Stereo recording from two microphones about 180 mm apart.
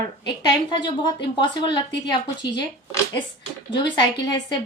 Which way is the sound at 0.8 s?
25° left (ahead or behind).